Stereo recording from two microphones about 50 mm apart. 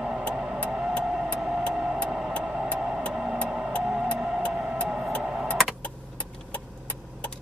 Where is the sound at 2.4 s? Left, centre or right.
Centre.